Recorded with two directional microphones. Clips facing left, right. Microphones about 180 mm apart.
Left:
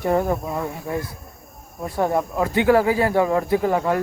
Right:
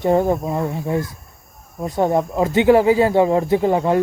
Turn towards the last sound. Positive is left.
turn(degrees=-25)  # may be behind; listen again after turning